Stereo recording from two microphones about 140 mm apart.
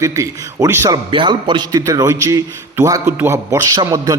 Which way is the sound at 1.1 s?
35° right (ahead or behind).